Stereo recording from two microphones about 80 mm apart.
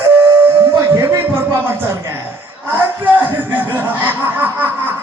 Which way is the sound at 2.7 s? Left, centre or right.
Right.